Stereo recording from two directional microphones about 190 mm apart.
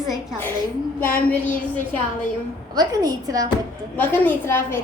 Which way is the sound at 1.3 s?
10° left (ahead or behind).